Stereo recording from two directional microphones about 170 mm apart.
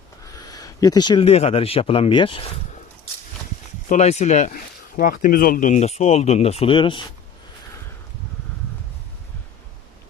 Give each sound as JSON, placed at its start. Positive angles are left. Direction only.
{"t": 0.4, "sound": "speech", "side_deg": 20}
{"t": 3.8, "sound": "speech", "side_deg": 45}